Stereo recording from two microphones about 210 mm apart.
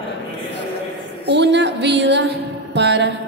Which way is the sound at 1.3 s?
55° right (ahead or behind).